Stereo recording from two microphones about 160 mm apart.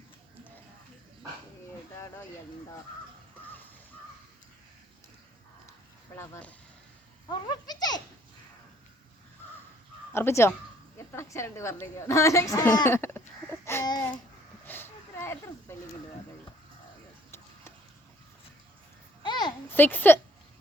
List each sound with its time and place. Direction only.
6.1 s speech: 15° left (ahead or behind)
7.3 s a child's voice: 25° left (ahead or behind)
10.1 s a woman's voice: 15° left (ahead or behind)
14.7 s a sound: 15° left (ahead or behind)
19.2 s a sound: 25° left (ahead or behind)
19.6 s speech: 10° left (ahead or behind)